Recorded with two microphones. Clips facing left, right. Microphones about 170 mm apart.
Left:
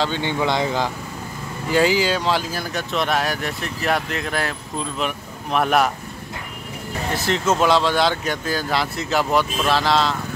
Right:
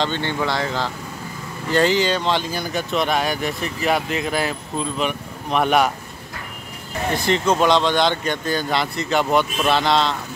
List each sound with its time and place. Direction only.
0.0 s speech: 10° left (ahead or behind)
7.2 s speech: 5° left (ahead or behind)